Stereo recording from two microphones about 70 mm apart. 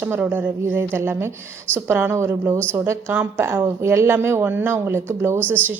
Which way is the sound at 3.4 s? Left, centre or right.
Right.